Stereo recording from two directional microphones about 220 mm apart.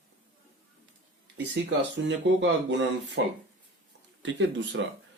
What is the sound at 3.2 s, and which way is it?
Speech, 55° right (ahead or behind).